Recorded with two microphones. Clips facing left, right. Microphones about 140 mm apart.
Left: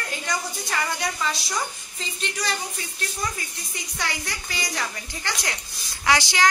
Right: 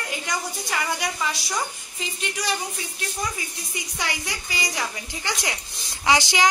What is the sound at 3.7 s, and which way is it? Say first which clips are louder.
A woman's voice: right 1 dB; 15° right (ahead or behind).